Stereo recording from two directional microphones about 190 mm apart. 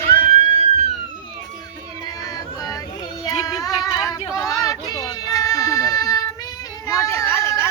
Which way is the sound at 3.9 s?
20° left (ahead or behind).